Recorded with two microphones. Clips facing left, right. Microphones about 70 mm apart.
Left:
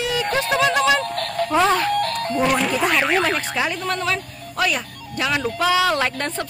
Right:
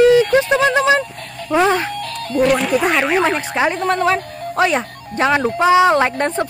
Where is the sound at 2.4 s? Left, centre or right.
Centre.